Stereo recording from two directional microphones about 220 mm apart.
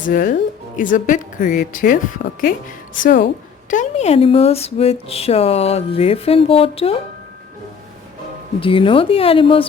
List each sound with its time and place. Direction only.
0.1 s speech: 35° left (ahead or behind)
8.6 s speech: 25° left (ahead or behind)